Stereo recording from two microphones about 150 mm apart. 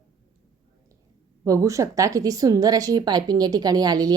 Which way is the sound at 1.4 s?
20° right (ahead or behind).